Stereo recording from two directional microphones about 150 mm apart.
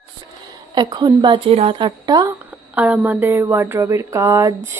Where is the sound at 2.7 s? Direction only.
10° right (ahead or behind).